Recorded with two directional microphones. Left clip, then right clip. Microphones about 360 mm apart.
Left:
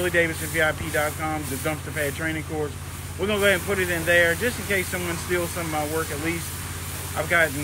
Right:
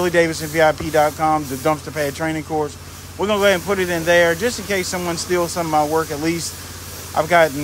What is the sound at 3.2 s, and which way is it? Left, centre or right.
Speech, centre.